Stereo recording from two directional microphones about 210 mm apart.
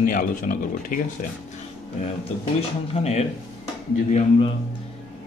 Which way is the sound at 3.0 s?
30° left (ahead or behind).